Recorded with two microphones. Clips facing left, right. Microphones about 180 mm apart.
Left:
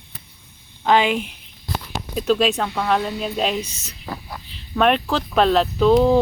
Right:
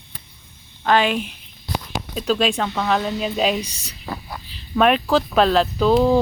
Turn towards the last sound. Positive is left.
turn(degrees=0)  # may be behind; listen again after turning